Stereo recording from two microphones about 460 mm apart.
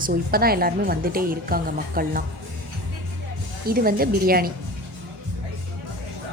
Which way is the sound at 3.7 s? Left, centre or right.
Centre.